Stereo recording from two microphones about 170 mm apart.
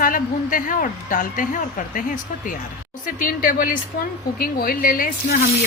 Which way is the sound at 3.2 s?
55° left (ahead or behind).